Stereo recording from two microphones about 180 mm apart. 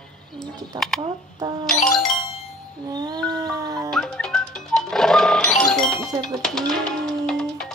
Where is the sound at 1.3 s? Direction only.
25° right (ahead or behind).